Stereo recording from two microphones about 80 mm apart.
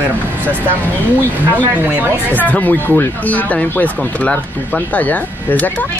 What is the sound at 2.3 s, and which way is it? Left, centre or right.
Speech, centre.